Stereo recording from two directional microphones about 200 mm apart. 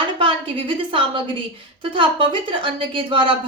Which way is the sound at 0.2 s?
25° right (ahead or behind).